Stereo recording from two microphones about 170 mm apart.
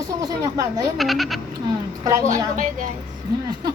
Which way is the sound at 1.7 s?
20° right (ahead or behind).